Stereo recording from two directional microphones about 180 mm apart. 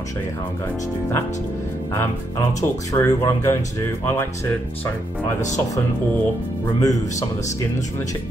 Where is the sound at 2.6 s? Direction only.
15° left (ahead or behind).